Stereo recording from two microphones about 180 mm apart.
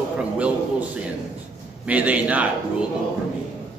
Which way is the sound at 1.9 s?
10° right (ahead or behind).